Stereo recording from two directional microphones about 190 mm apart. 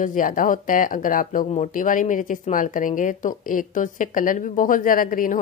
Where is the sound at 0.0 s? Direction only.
45° left (ahead or behind).